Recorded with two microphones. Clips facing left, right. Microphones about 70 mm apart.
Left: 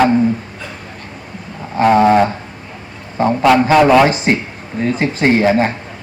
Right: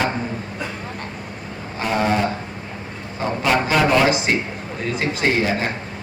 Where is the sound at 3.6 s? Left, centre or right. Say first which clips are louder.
Left 5 dB; left.